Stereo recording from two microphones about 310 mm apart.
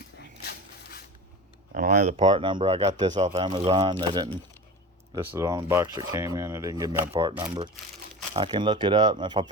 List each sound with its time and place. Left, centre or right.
1.7 s speech: right